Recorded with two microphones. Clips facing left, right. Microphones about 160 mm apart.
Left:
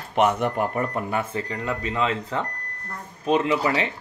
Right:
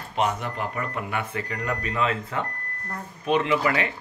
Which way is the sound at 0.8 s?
35° left (ahead or behind).